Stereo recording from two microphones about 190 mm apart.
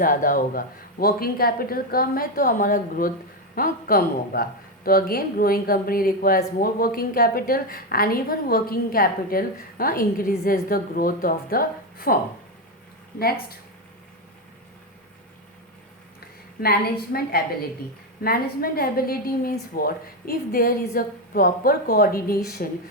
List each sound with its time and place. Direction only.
0.0 s speech: 45° left (ahead or behind)
13.1 s speech: 55° left (ahead or behind)
16.6 s speech: 50° left (ahead or behind)